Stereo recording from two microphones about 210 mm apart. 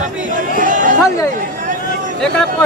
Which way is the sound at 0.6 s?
40° right (ahead or behind).